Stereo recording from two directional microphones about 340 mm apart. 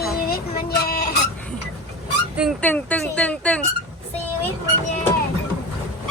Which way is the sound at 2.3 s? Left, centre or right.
Centre.